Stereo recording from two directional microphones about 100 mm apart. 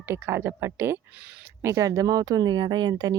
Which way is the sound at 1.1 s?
10° right (ahead or behind).